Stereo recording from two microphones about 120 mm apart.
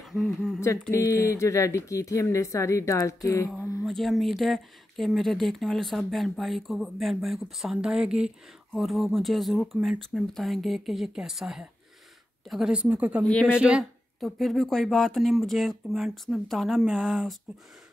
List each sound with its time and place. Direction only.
0.0 s a sound: centre (ahead or behind)
0.9 s speech: 25° left (ahead or behind)
3.8 s speech: centre (ahead or behind)
13.2 s speech: 10° left (ahead or behind)
13.6 s speech: 5° right (ahead or behind)